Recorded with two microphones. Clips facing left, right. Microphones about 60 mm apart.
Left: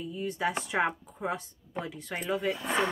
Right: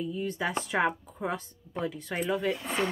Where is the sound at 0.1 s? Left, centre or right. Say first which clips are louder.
Even; centre.